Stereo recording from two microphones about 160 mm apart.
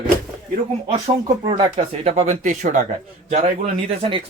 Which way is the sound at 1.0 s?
35° right (ahead or behind).